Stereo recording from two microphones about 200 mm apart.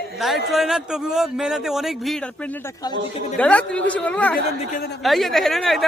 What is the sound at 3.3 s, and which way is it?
A woman's voice, 5° left (ahead or behind).